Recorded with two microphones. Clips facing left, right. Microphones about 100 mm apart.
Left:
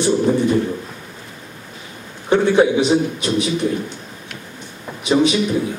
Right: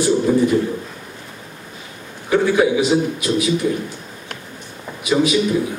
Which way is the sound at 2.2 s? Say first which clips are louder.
Left 2 dB; 25° left (ahead or behind).